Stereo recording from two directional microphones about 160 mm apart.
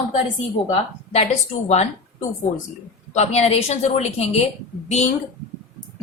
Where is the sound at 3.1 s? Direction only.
40° left (ahead or behind).